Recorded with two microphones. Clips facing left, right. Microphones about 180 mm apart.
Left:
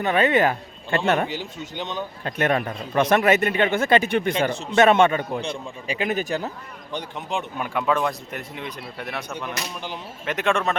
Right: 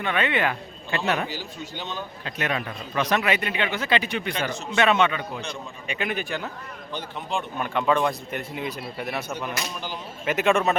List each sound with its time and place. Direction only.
0.0 s speech: 40° left (ahead or behind)
1.3 s speech: 25° left (ahead or behind)
2.2 s a man's voice: 50° left (ahead or behind)
4.4 s speech: 30° left (ahead or behind)
4.9 s a man's voice: 45° left (ahead or behind)
5.4 s speech: 30° left (ahead or behind)
6.9 s speech: 15° left (ahead or behind); by 10.8 s 5° right (ahead or behind)